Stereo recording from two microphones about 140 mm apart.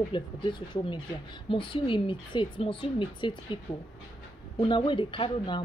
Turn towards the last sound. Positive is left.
turn(degrees=35)  # may be behind; listen again after turning